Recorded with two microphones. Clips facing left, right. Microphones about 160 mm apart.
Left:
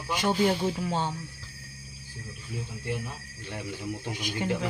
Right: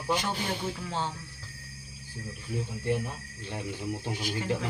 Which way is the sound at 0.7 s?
15° left (ahead or behind).